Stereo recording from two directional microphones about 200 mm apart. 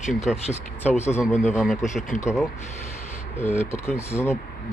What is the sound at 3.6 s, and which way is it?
Speech, 15° left (ahead or behind).